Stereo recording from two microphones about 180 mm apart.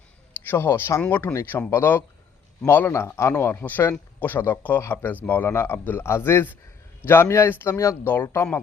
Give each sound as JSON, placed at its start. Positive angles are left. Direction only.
{"t": 0.4, "sound": "a man's voice", "side_deg": 10}